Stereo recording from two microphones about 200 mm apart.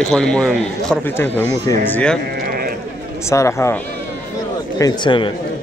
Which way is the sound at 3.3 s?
15° left (ahead or behind).